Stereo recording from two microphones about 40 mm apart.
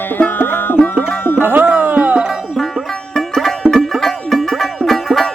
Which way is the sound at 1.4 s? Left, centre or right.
Right.